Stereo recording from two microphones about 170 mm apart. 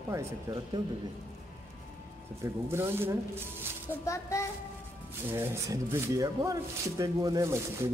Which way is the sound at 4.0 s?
20° left (ahead or behind).